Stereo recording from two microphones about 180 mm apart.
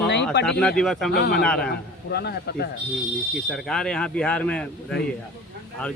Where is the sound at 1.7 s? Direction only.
65° left (ahead or behind).